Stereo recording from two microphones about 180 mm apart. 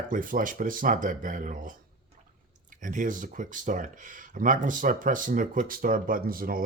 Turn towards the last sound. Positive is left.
turn(degrees=-55)  # may be behind; listen again after turning